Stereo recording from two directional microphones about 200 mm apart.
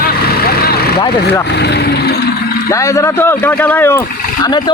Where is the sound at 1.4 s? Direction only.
55° left (ahead or behind).